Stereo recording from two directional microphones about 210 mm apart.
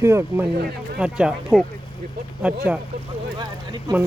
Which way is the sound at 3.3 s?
20° right (ahead or behind).